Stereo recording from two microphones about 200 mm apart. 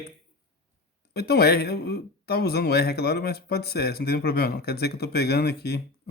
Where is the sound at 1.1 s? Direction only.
50° left (ahead or behind).